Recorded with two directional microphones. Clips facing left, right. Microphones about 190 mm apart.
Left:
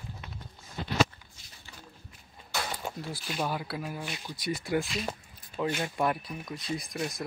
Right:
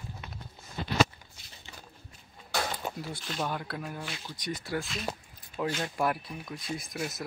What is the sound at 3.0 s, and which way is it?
Speech, 5° left (ahead or behind).